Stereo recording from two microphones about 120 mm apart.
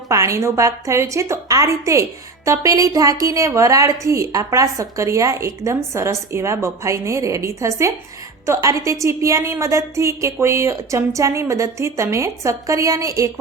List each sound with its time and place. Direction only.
0.1 s a woman's voice: 25° right (ahead or behind)